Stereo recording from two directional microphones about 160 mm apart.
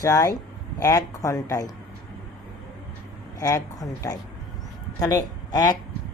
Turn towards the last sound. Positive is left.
turn(degrees=20)  # may be behind; listen again after turning